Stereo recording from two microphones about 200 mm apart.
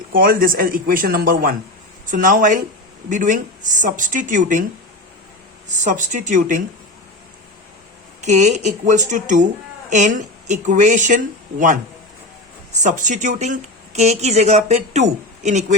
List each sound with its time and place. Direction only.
0.1 s speech: 45° right (ahead or behind)
5.8 s speech: 40° right (ahead or behind)
8.2 s speech: 35° right (ahead or behind)
10.5 s speech: 35° right (ahead or behind)
12.7 s speech: 40° right (ahead or behind)